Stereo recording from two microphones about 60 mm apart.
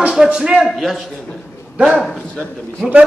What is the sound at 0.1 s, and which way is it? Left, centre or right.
Speech, centre.